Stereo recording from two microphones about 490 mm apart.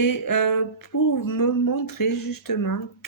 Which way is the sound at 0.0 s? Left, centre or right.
Left.